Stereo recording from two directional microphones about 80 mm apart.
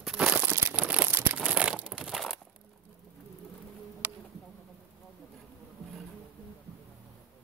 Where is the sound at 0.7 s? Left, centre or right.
Centre.